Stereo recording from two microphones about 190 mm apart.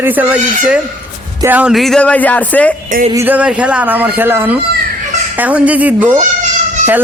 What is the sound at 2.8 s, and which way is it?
Music, 40° right (ahead or behind).